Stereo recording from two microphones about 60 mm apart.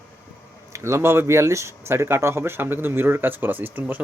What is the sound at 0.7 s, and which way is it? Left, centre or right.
Speech, right.